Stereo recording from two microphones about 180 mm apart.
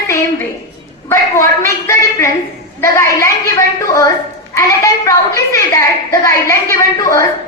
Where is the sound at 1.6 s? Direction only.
15° left (ahead or behind).